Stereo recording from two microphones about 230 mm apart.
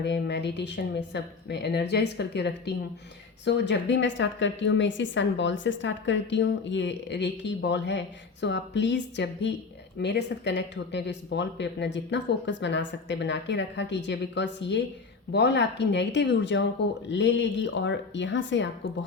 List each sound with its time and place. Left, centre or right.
0.0 s a woman's voice: left